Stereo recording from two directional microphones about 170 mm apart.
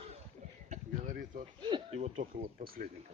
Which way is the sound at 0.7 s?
50° right (ahead or behind).